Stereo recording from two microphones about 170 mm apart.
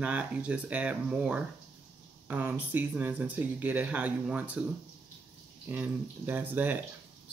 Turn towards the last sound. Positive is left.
turn(degrees=-10)  # may be behind; listen again after turning